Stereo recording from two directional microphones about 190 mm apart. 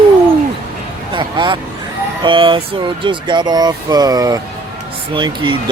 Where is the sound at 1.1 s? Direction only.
25° right (ahead or behind).